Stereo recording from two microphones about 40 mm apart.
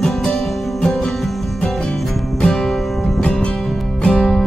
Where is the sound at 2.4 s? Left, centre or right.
Centre.